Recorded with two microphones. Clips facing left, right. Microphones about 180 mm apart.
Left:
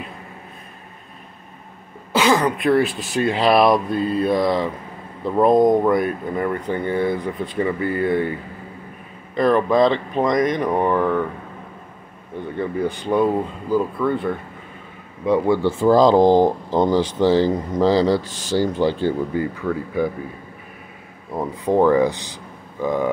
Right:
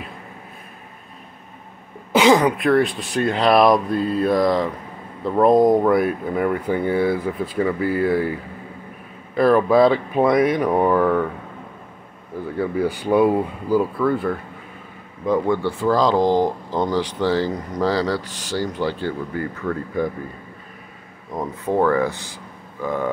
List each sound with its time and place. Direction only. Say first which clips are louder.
2.1 s speech: right 3 dB; 15° right (ahead or behind)
2.5 s speech: even; centre (ahead or behind)
12.4 s speech: right 1 dB; 5° right (ahead or behind)
15.8 s speech: left 5 dB; 25° left (ahead or behind)
19.6 s speech: right 2 dB; 5° left (ahead or behind)
21.3 s speech: left 3 dB; 10° left (ahead or behind)